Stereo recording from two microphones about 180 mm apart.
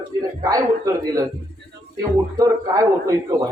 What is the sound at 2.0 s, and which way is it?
A man's voice, 20° right (ahead or behind).